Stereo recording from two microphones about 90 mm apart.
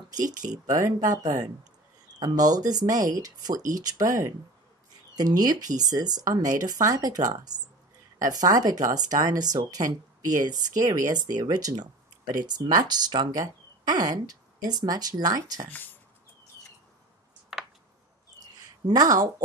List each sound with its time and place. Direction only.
0.3 s speech: 40° right (ahead or behind)
15.7 s speech: 20° left (ahead or behind)
18.4 s a sound: 50° right (ahead or behind)